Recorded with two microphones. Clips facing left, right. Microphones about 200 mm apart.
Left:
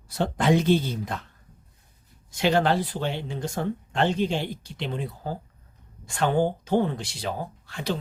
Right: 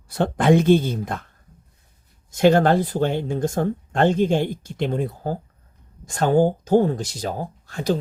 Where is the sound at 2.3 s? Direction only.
50° right (ahead or behind).